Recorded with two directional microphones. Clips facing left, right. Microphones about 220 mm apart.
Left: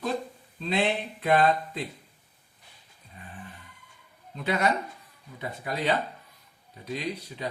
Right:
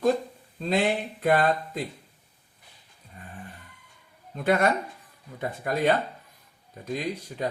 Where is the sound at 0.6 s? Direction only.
45° right (ahead or behind).